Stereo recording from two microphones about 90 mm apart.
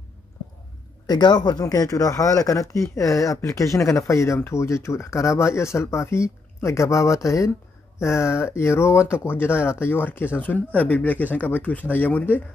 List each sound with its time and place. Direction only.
1.0 s speech: 50° left (ahead or behind); by 12.4 s 20° left (ahead or behind)